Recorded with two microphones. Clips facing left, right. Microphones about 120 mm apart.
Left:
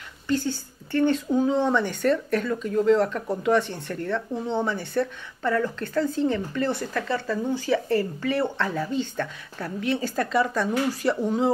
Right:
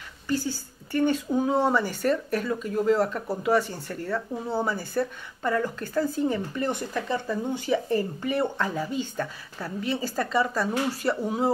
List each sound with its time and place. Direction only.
0.3 s speech: 10° right (ahead or behind)